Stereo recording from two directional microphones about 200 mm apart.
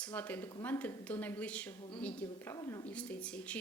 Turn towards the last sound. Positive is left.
turn(degrees=5)  # may be behind; listen again after turning